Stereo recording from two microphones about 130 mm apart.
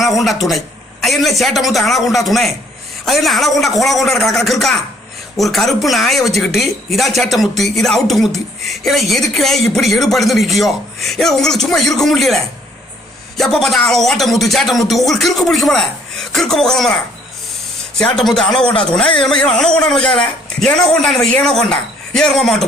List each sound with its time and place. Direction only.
0.0 s a man's voice: centre (ahead or behind)